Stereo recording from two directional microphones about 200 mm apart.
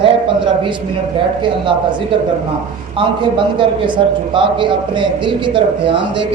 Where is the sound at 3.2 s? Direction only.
25° right (ahead or behind).